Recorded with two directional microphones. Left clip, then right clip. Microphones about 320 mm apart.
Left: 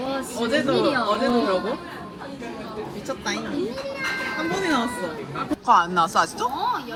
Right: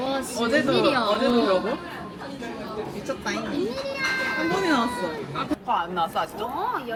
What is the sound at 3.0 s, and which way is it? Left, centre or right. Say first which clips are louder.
Speech: left 2 dB; centre.